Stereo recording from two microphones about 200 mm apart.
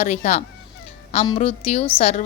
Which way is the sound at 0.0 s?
35° left (ahead or behind).